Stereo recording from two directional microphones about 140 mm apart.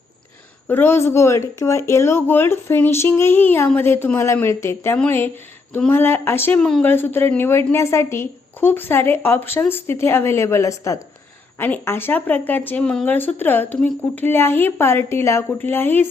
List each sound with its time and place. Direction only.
0.7 s speech: 15° left (ahead or behind)
6.6 s speech: 5° left (ahead or behind)
6.8 s speech: 15° left (ahead or behind)